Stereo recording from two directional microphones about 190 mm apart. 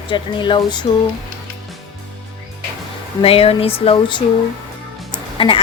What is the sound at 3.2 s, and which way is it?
Speech, 30° left (ahead or behind).